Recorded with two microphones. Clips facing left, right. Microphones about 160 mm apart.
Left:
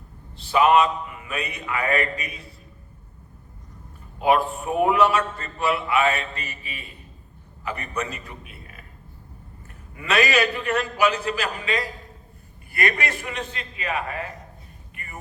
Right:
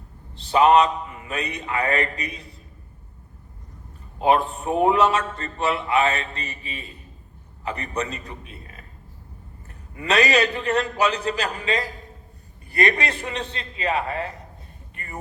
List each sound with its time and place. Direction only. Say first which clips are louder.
0.4 s a man's voice: right 2 dB; 35° right (ahead or behind)
4.2 s a man's voice: right 1 dB; 30° right (ahead or behind)
9.9 s a man's voice: right 1 dB; 35° right (ahead or behind)